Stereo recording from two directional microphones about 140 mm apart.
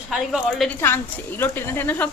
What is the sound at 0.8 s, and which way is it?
A woman's voice, 15° left (ahead or behind).